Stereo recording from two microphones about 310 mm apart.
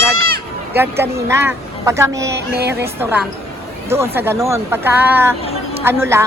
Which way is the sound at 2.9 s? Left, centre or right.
Centre.